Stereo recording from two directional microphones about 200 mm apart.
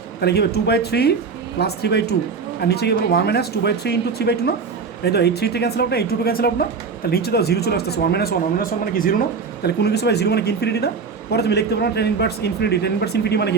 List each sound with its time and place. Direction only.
0.2 s a man's voice: 55° left (ahead or behind)